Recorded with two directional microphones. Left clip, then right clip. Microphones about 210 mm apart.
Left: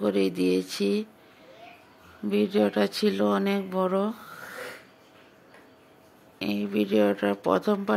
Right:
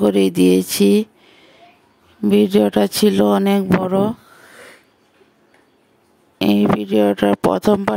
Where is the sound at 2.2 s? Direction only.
50° right (ahead or behind).